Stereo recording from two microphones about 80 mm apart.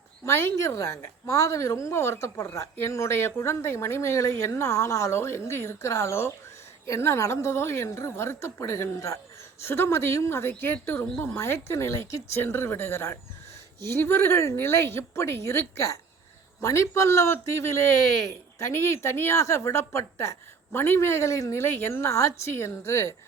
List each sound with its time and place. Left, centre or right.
0.3 s speech: left
21.6 s speech: left